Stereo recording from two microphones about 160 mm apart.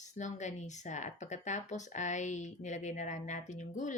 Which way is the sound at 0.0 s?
50° left (ahead or behind).